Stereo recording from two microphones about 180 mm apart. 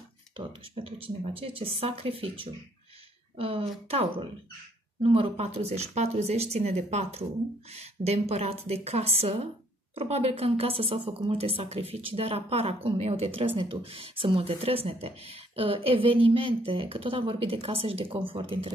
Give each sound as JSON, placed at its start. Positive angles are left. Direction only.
{"t": 0.4, "sound": "speech", "side_deg": -25}